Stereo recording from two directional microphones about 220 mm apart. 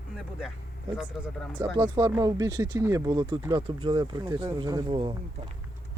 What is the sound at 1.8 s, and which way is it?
Speech, 15° right (ahead or behind).